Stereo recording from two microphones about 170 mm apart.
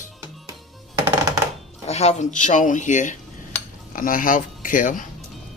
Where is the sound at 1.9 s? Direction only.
40° left (ahead or behind).